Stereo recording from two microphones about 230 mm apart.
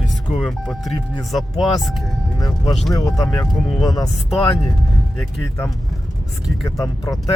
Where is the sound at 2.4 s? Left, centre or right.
Centre.